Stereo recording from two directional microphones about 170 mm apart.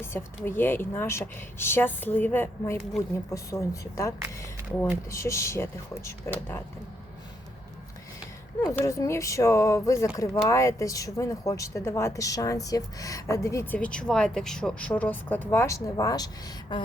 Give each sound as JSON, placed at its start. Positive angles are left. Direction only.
{"t": 0.0, "sound": "a woman's voice", "side_deg": 15}
{"t": 5.1, "sound": "speech", "side_deg": 15}
{"t": 8.6, "sound": "speech", "side_deg": 20}